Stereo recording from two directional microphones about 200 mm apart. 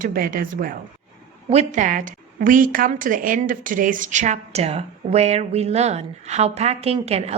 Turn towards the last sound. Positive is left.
turn(degrees=-30)  # may be behind; listen again after turning